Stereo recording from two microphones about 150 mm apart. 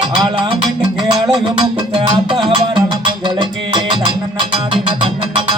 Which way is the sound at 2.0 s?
35° right (ahead or behind).